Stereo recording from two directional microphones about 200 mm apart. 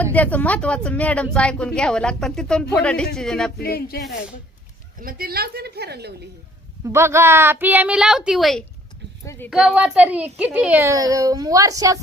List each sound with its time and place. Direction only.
0.0 s speech: 10° left (ahead or behind)
3.6 s speech: 50° left (ahead or behind)
4.9 s a woman's voice: 45° right (ahead or behind)
6.8 s a child's voice: 15° right (ahead or behind)